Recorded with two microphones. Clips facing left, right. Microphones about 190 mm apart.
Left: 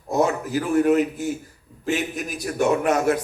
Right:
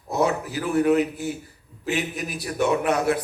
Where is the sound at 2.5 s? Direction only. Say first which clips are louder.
Left 2 dB; 45° left (ahead or behind).